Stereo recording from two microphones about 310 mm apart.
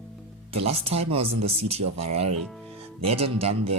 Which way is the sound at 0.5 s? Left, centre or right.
Centre.